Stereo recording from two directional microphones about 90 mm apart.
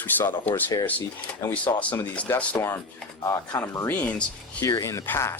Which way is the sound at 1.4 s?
40° left (ahead or behind).